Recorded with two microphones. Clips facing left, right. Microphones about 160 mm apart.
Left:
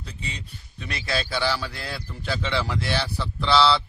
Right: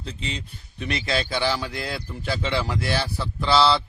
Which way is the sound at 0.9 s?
20° right (ahead or behind).